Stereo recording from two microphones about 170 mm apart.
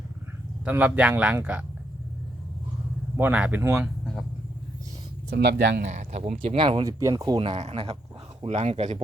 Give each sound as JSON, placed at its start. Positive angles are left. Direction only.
{"t": 0.6, "sound": "speech", "side_deg": -10}
{"t": 3.2, "sound": "speech", "side_deg": -10}
{"t": 3.8, "sound": "speech", "side_deg": 5}
{"t": 5.3, "sound": "speech", "side_deg": -70}
{"t": 5.8, "sound": "speech", "side_deg": -45}
{"t": 6.4, "sound": "speech", "side_deg": -30}
{"t": 6.8, "sound": "speech", "side_deg": -20}